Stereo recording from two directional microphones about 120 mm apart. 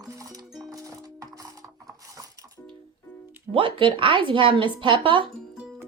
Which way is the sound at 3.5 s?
45° right (ahead or behind).